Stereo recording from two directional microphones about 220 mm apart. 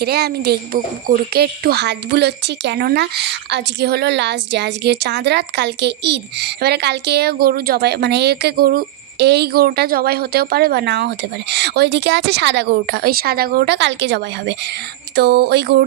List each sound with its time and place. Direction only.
0.0 s speech: 45° right (ahead or behind)